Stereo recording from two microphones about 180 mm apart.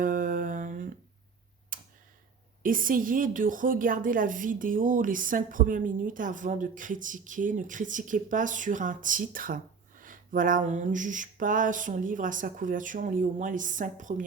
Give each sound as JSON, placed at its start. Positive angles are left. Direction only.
{"t": 0.0, "sound": "humming", "side_deg": -50}
{"t": 1.7, "sound": "tick", "side_deg": -50}
{"t": 2.6, "sound": "a woman's voice", "side_deg": -50}